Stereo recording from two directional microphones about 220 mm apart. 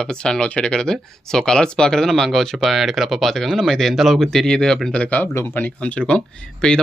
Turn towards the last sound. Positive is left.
turn(degrees=5)  # may be behind; listen again after turning